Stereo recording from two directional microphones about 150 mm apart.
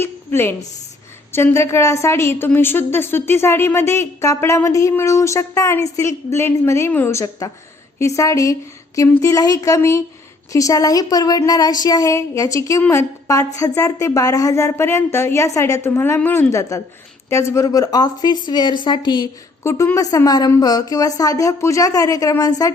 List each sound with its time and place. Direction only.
0.0 s a woman's voice: 15° left (ahead or behind)
19.6 s a woman's voice: 20° left (ahead or behind)